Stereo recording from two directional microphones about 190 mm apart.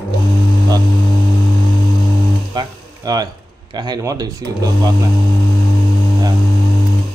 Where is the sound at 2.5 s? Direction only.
20° right (ahead or behind).